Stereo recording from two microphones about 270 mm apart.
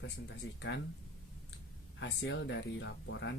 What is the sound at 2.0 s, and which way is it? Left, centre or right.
Speech, left.